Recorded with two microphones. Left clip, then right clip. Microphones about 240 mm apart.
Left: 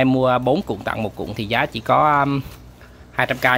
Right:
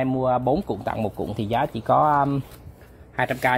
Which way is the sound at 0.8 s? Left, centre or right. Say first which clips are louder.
Left 2 dB; centre.